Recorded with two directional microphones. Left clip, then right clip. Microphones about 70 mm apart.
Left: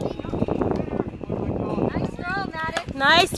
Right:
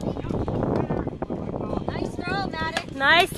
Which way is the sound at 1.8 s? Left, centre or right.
Right.